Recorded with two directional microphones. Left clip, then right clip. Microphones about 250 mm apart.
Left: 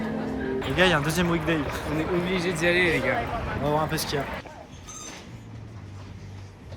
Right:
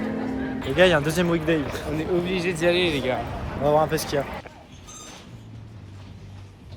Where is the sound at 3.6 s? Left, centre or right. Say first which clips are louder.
Right 7 dB; centre.